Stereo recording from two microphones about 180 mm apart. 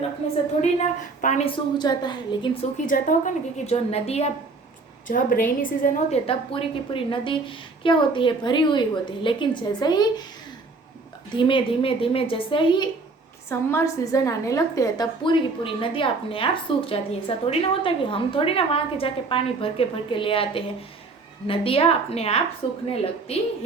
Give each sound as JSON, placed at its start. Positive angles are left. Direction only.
{"t": 0.6, "sound": "a woman's voice", "side_deg": 40}
{"t": 1.5, "sound": "a woman's voice", "side_deg": 25}
{"t": 2.8, "sound": "a woman's voice", "side_deg": 45}
{"t": 5.0, "sound": "a woman's voice", "side_deg": 50}
{"t": 6.2, "sound": "a woman's voice", "side_deg": 30}
{"t": 11.3, "sound": "a woman's voice", "side_deg": 30}
{"t": 13.5, "sound": "a woman's voice", "side_deg": 15}